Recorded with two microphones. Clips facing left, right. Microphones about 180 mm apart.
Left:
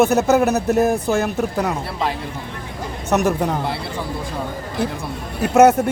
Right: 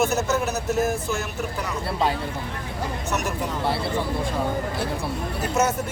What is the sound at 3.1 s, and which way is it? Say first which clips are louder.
Speech: left 11 dB; 60° left (ahead or behind).